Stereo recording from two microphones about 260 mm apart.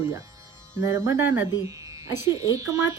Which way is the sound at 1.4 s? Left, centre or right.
Centre.